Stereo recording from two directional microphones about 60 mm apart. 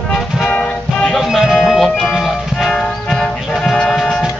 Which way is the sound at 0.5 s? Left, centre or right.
Centre.